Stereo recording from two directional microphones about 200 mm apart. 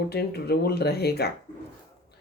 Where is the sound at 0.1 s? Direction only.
55° left (ahead or behind).